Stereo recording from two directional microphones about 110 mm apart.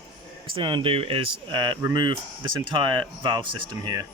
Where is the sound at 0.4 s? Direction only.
50° right (ahead or behind).